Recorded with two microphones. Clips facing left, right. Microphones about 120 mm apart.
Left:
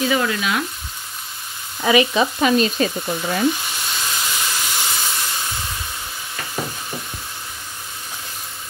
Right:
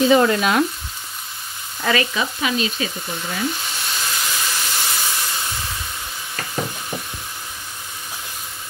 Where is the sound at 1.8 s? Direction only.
15° left (ahead or behind).